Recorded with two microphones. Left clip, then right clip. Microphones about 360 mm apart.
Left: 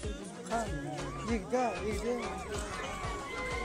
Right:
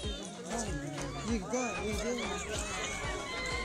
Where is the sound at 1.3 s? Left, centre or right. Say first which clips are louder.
Left 4 dB; left.